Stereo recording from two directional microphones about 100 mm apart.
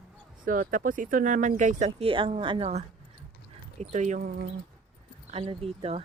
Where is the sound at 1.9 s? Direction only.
60° right (ahead or behind).